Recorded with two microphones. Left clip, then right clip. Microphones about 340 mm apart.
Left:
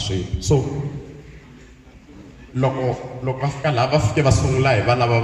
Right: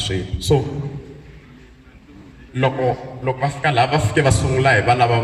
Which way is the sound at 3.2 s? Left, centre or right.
Right.